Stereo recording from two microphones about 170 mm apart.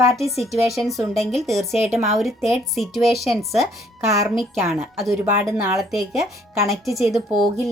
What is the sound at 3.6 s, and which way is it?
Speech, 20° right (ahead or behind).